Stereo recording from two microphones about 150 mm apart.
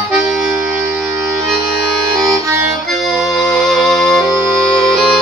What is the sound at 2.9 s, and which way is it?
Accordion, centre (ahead or behind).